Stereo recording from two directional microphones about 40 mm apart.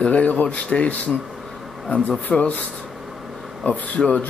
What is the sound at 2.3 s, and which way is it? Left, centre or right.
Speech, left.